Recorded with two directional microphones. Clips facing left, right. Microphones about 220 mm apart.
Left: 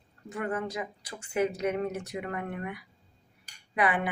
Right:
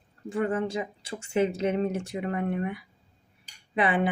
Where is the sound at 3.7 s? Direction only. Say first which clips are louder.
Right 2 dB; 25° right (ahead or behind).